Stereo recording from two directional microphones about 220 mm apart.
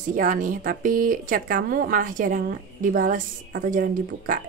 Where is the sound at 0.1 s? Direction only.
40° right (ahead or behind).